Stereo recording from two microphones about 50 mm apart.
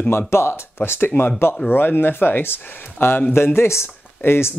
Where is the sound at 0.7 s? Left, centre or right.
Left.